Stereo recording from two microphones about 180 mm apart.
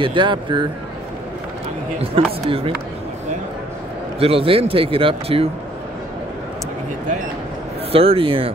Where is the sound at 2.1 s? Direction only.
30° right (ahead or behind).